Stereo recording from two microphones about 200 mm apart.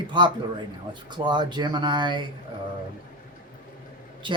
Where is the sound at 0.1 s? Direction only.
25° right (ahead or behind).